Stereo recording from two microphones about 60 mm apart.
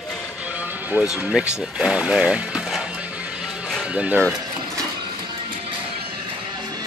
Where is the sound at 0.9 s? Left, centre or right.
Right.